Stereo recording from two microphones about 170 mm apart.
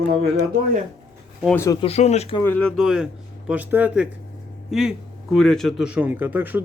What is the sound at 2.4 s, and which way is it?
Speech, 10° left (ahead or behind).